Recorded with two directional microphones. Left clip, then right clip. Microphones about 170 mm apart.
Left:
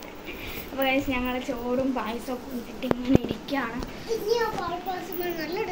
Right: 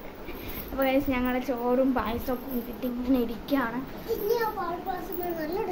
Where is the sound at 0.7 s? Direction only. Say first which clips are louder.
Even; 10° right (ahead or behind).